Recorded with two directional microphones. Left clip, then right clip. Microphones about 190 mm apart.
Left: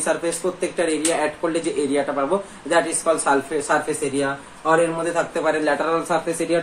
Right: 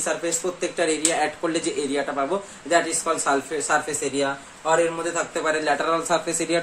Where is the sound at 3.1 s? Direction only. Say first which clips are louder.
Left 4 dB; 15° right (ahead or behind).